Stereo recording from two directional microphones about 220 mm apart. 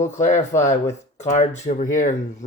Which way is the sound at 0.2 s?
35° left (ahead or behind).